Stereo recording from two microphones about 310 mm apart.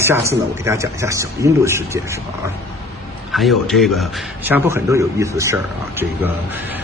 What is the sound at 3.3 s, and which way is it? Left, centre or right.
A man's voice, centre.